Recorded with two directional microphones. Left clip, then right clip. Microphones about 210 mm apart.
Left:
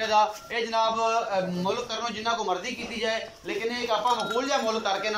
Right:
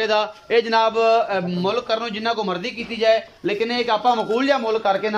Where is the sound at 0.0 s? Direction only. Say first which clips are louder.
Right 2 dB; 55° right (ahead or behind).